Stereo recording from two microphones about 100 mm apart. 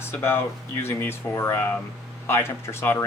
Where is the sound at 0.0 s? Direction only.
25° left (ahead or behind).